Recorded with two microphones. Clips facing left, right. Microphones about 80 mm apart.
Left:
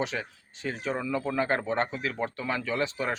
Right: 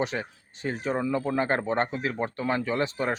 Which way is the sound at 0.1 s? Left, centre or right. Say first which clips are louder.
Right 2 dB; right.